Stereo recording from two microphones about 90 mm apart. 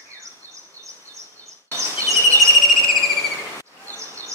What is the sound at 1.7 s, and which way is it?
Bird vocalization, 35° right (ahead or behind).